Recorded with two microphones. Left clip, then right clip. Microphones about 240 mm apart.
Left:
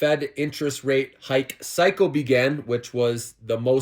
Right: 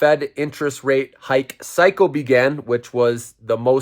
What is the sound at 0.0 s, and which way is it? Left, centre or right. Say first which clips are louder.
Speech: right 6 dB; right.